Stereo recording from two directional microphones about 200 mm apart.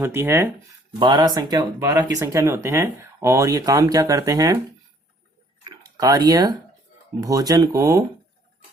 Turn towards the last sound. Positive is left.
turn(degrees=-15)  # may be behind; listen again after turning